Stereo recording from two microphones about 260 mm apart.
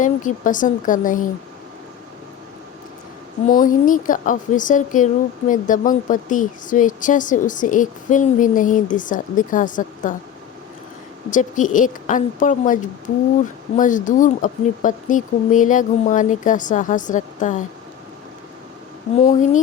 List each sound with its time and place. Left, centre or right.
0.0 s speech: left
3.4 s a woman's voice: left
11.3 s a woman's voice: left
19.2 s a woman's voice: left